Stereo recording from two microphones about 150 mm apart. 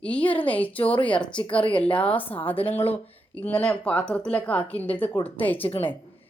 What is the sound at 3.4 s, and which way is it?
Speech, 10° left (ahead or behind).